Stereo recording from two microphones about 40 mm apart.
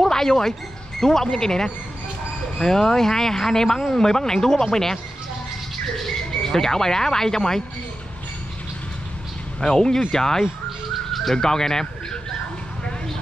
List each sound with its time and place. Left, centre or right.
0.0 s speech: centre
9.6 s speech: centre